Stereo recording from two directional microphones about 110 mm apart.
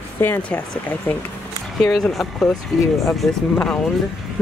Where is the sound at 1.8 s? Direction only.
Centre (ahead or behind).